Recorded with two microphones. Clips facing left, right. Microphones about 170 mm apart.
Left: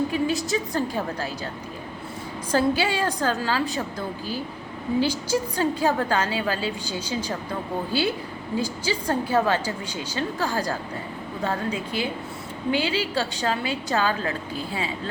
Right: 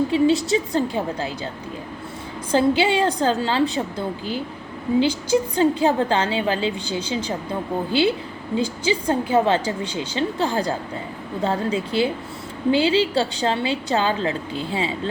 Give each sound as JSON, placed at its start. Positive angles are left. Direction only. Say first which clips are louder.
{"t": 0.1, "sound": "a woman's voice", "louder": "right 6 dB", "side_deg": -25}
{"t": 2.5, "sound": "a woman's voice", "louder": "right 4 dB", "side_deg": -20}
{"t": 4.9, "sound": "a woman's voice", "louder": "right 5 dB", "side_deg": -20}
{"t": 8.5, "sound": "a woman's voice", "louder": "right 5 dB", "side_deg": -20}